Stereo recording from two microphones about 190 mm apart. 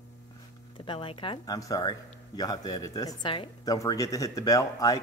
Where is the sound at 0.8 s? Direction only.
25° left (ahead or behind).